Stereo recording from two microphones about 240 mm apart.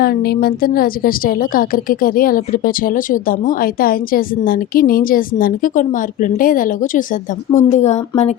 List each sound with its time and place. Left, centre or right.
0.0 s a woman's voice: left